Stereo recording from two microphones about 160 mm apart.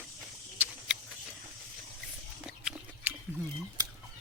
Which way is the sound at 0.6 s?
10° right (ahead or behind).